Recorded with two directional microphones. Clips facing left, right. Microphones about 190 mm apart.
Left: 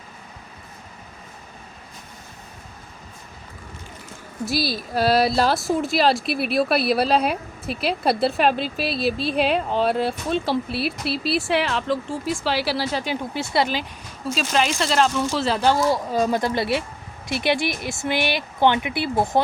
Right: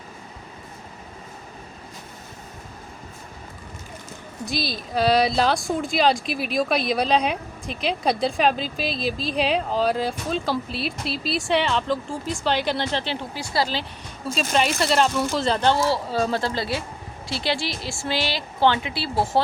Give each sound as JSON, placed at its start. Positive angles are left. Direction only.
{"t": 4.4, "sound": "speech", "side_deg": 5}
{"t": 13.3, "sound": "speech", "side_deg": 25}
{"t": 14.3, "sound": "speech", "side_deg": 0}